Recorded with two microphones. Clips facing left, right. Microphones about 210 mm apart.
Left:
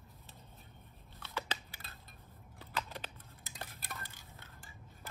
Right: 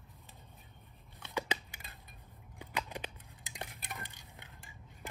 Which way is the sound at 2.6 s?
15° right (ahead or behind).